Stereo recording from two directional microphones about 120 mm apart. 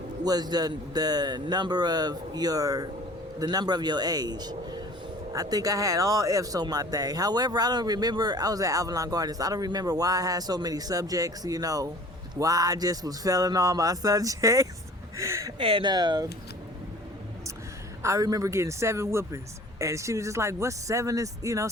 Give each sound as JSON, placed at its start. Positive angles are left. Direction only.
{"t": 0.3, "sound": "speech", "side_deg": -35}
{"t": 15.1, "sound": "a sound", "side_deg": -25}
{"t": 15.5, "sound": "speech", "side_deg": -45}
{"t": 18.0, "sound": "speech", "side_deg": -30}